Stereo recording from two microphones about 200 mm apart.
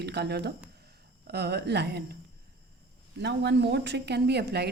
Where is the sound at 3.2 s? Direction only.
60° right (ahead or behind).